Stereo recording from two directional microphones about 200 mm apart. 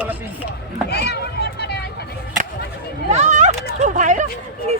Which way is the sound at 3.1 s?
35° right (ahead or behind).